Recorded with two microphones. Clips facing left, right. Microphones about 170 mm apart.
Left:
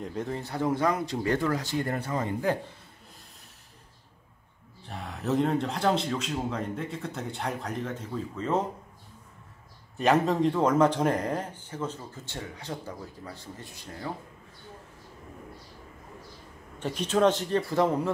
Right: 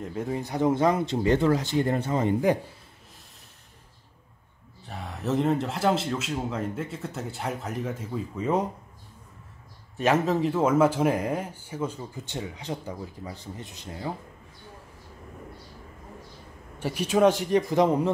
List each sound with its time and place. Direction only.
0.0 s speech: 5° right (ahead or behind)
4.8 s speech: centre (ahead or behind)
9.9 s speech: centre (ahead or behind); by 14.1 s 20° right (ahead or behind)
16.8 s speech: 10° right (ahead or behind)